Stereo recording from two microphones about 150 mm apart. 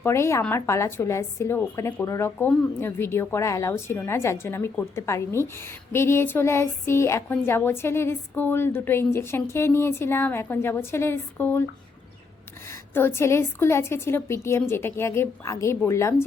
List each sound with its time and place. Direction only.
0.0 s a woman's voice: 20° left (ahead or behind)
12.9 s a woman's voice: 15° left (ahead or behind)